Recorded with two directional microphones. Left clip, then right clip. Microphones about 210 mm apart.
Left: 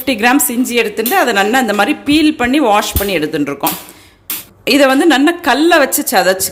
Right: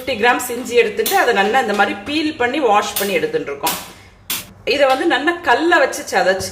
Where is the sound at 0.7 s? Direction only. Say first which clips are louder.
Left 1 dB; 50° left (ahead or behind).